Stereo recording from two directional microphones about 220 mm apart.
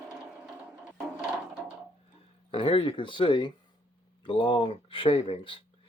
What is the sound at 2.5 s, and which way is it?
Speech, 25° left (ahead or behind).